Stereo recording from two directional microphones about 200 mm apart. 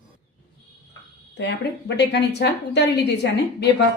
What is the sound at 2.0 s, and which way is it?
A woman's voice, 60° left (ahead or behind).